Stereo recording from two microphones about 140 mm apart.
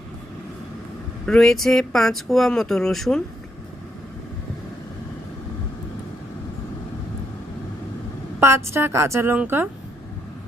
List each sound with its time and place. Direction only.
1.3 s speech: 5° left (ahead or behind)
8.4 s a woman's voice: 20° right (ahead or behind)